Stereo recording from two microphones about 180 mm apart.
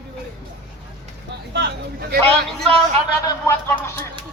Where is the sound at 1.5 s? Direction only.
65° right (ahead or behind).